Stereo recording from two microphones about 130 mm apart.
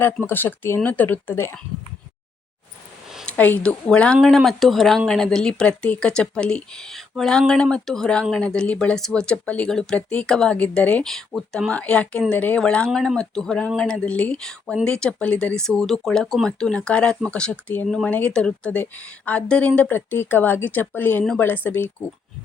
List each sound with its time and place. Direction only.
0.0 s speech: 15° left (ahead or behind)
3.2 s speech: 10° left (ahead or behind)